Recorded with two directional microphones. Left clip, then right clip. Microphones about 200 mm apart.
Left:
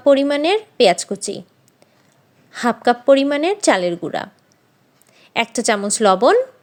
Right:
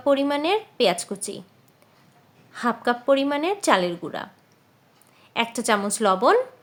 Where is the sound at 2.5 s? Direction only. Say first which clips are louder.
Left 7 dB; 25° left (ahead or behind).